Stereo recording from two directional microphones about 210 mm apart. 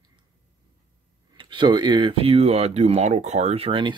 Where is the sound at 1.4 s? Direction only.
25° right (ahead or behind).